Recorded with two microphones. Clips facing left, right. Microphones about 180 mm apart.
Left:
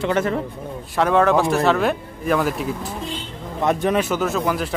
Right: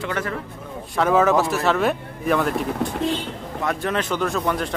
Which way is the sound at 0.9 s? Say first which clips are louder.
Left 1 dB; centre (ahead or behind).